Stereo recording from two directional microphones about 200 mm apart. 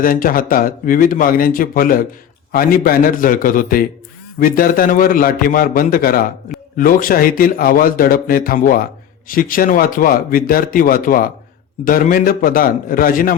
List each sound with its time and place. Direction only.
0.0 s a man's voice: 45° left (ahead or behind)